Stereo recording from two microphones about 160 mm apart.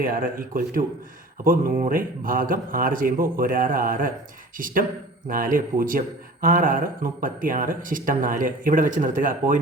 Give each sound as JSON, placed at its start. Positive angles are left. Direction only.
{"t": 0.0, "sound": "speech", "side_deg": -65}
{"t": 1.9, "sound": "speech", "side_deg": -60}